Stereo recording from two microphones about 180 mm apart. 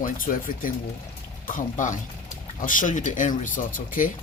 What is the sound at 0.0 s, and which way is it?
Speech, 50° left (ahead or behind).